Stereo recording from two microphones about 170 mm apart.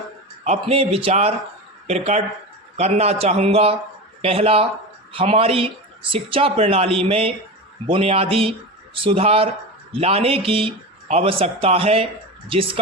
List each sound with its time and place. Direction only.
0.4 s a man's voice: 40° right (ahead or behind)